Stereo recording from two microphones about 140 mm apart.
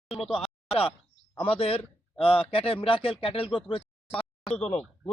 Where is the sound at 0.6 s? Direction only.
40° left (ahead or behind).